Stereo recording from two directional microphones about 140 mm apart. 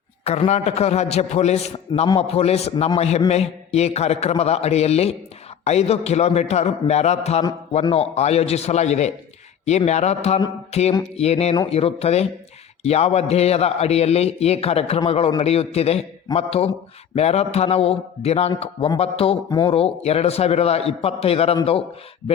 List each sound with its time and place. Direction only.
0.3 s a man's voice: 50° left (ahead or behind)
19.5 s speech: 30° left (ahead or behind)
19.7 s a man's voice: 45° left (ahead or behind)